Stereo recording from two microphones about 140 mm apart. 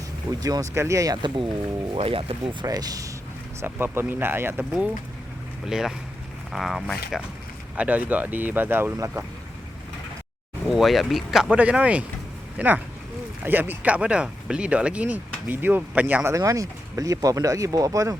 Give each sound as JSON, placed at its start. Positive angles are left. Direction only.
{"t": 0.3, "sound": "speech", "side_deg": -25}
{"t": 2.0, "sound": "speech", "side_deg": -40}
{"t": 2.6, "sound": "speech", "side_deg": -25}
{"t": 7.8, "sound": "speech", "side_deg": -10}
{"t": 10.7, "sound": "speech", "side_deg": 0}